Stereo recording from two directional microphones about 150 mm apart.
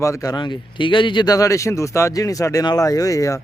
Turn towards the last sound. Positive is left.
turn(degrees=20)  # may be behind; listen again after turning